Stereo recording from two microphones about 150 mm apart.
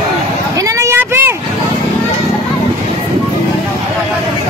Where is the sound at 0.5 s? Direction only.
20° right (ahead or behind).